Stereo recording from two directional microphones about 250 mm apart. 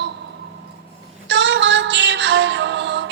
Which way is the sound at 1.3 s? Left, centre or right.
Right.